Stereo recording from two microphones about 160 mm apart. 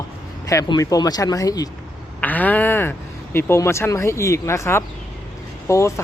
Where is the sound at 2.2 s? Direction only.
10° left (ahead or behind).